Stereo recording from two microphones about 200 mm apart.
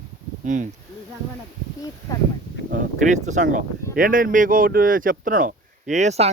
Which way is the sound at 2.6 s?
40° right (ahead or behind).